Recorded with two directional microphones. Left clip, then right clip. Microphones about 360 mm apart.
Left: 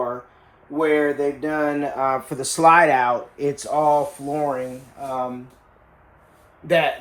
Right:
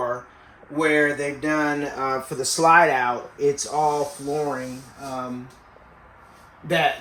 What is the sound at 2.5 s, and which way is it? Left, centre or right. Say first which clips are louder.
Speech: left 2 dB; left.